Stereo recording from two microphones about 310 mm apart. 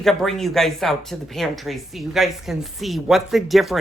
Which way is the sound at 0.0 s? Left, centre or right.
Centre.